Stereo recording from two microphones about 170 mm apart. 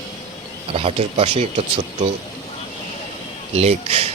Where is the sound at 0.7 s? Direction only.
35° right (ahead or behind).